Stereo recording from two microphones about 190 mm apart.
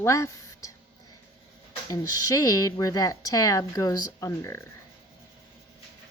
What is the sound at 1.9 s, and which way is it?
Speech, 20° left (ahead or behind).